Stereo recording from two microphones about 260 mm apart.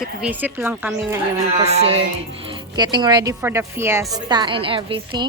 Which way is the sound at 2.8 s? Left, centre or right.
Centre.